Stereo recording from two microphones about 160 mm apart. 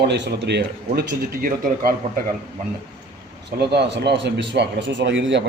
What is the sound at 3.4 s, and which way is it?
A man's voice, 90° right.